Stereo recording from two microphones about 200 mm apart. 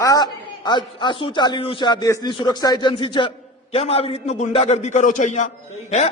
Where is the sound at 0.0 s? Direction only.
20° left (ahead or behind).